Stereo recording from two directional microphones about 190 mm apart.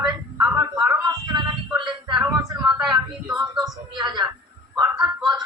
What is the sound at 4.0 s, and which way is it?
Speech, 25° right (ahead or behind).